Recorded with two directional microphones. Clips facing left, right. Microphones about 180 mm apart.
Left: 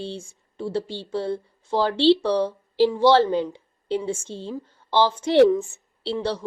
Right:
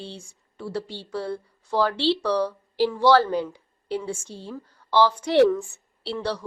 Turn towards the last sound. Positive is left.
turn(degrees=25)  # may be behind; listen again after turning